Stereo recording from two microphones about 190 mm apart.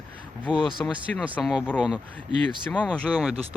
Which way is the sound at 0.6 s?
25° left (ahead or behind).